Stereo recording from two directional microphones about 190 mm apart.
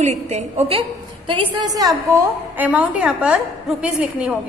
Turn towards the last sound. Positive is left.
turn(degrees=-5)  # may be behind; listen again after turning